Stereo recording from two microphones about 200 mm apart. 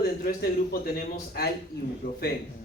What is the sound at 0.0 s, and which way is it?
A man's voice, 50° left (ahead or behind).